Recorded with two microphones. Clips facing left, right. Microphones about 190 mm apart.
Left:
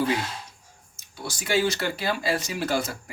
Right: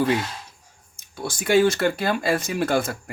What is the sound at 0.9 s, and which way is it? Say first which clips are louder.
Speech: right 5 dB; 50° right (ahead or behind).